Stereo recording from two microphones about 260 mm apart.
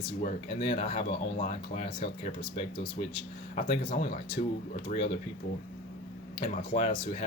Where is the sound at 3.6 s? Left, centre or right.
Left.